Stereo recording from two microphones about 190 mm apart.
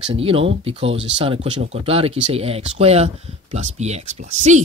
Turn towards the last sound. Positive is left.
turn(degrees=-35)  # may be behind; listen again after turning